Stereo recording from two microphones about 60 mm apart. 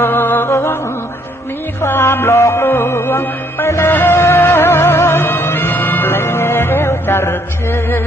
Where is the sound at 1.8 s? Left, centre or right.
Left.